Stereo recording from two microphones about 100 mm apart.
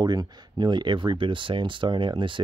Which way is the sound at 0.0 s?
45° right (ahead or behind).